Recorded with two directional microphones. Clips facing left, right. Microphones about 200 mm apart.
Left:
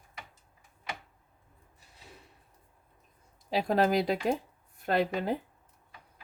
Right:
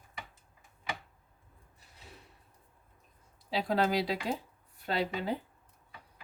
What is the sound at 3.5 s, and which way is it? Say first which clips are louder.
Speech: left 3 dB; 50° left (ahead or behind).